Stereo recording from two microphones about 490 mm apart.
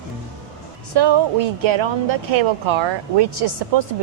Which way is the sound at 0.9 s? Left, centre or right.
Right.